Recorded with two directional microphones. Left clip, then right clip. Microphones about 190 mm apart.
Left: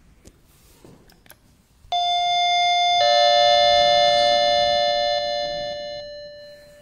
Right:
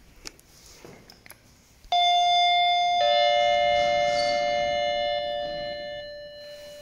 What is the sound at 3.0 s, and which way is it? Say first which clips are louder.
Doorbell: left 7 dB; 45° left (ahead or behind).